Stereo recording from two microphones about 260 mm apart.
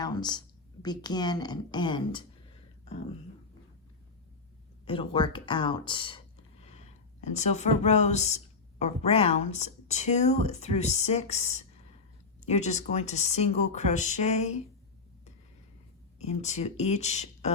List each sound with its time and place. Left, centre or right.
0.0 s a woman's voice: centre
2.8 s beatboxing: left
4.9 s speech: centre
16.1 s speech: left